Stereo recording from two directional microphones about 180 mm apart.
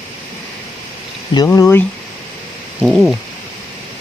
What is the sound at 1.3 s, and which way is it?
Speech, 20° left (ahead or behind).